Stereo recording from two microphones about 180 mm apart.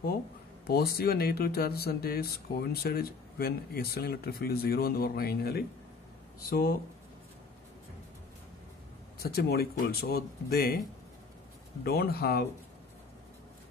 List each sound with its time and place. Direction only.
0.7 s speech: 60° left (ahead or behind)
9.2 s speech: 60° left (ahead or behind)
11.8 s speech: 60° left (ahead or behind)